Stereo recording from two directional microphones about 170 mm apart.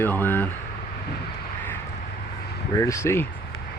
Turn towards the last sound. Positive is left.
turn(degrees=15)  # may be behind; listen again after turning